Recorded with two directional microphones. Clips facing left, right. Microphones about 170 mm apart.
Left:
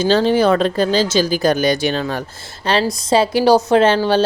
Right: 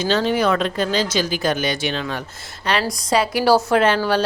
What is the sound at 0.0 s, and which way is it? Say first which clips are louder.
Speech: left 5 dB; 30° left (ahead or behind).